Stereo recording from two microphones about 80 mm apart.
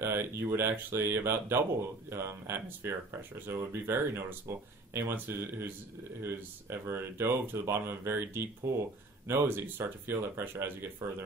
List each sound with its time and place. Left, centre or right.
0.0 s speech: right